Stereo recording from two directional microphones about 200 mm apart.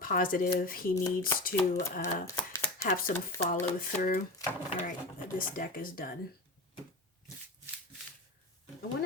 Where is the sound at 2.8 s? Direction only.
45° left (ahead or behind).